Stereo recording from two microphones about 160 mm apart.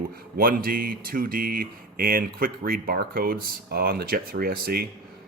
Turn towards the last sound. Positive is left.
turn(degrees=-70)  # may be behind; listen again after turning